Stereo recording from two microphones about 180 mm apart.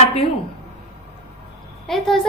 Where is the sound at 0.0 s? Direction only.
30° left (ahead or behind).